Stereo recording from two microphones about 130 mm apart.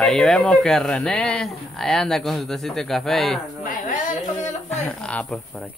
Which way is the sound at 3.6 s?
85° left.